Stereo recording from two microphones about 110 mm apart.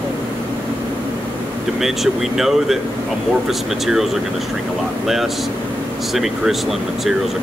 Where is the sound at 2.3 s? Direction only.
Centre (ahead or behind).